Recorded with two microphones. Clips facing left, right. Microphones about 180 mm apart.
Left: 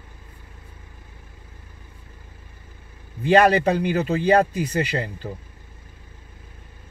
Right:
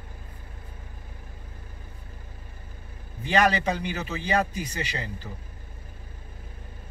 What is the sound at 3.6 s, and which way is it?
Speech, 55° left (ahead or behind).